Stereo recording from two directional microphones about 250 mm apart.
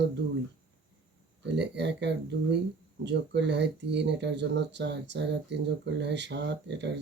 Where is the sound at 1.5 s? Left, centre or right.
Right.